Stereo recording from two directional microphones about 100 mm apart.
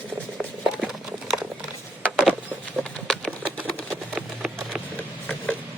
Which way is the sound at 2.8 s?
10° left (ahead or behind).